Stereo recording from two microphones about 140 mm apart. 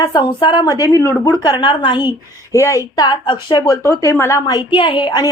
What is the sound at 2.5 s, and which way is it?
A woman's voice, 20° left (ahead or behind).